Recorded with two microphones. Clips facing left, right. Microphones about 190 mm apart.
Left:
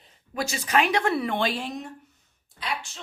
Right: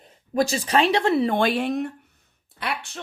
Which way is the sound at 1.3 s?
55° right (ahead or behind).